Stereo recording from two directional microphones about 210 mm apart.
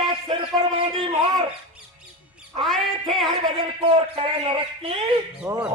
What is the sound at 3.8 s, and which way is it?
A man's voice, 25° right (ahead or behind).